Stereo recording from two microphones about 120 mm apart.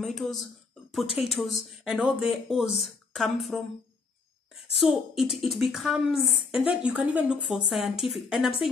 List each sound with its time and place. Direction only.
0.0 s speech: centre (ahead or behind)